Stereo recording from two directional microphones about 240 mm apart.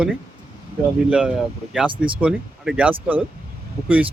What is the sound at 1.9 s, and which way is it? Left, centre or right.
Speech, right.